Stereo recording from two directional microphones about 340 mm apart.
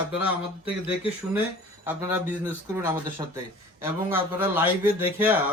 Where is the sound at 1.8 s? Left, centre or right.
Centre.